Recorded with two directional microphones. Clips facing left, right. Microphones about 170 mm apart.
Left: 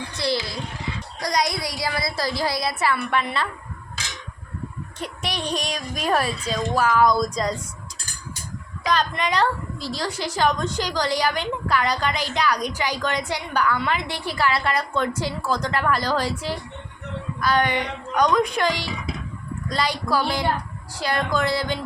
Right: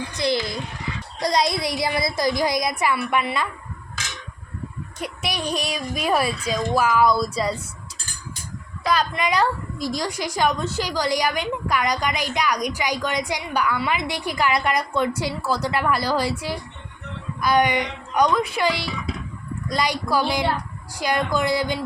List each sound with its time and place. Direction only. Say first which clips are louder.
0.2 s a child's voice: right 2 dB; 20° right (ahead or behind)
4.9 s a woman's voice: right 1 dB; 10° right (ahead or behind)
8.9 s a woman's voice: right 1 dB; 10° right (ahead or behind)